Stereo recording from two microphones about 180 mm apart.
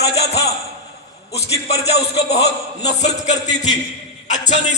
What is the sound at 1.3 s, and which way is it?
Speech, 35° left (ahead or behind).